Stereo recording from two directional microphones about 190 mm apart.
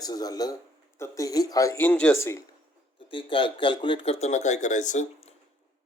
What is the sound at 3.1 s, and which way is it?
Speech, 25° left (ahead or behind).